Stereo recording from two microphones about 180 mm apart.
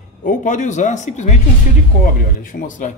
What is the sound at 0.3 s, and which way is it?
Speech, 45° left (ahead or behind).